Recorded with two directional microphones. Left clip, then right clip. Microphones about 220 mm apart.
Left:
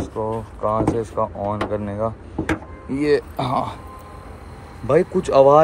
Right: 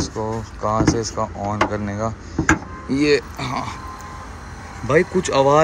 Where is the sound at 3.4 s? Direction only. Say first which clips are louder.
Left 4 dB; 15° left (ahead or behind).